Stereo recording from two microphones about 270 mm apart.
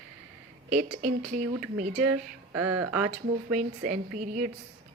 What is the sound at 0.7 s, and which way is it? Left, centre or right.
Speech, right.